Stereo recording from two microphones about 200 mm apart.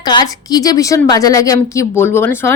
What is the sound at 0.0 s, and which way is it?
A woman's voice, 20° left (ahead or behind).